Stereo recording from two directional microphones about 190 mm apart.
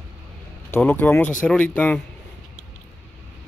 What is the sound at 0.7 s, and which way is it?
Speech, 10° left (ahead or behind).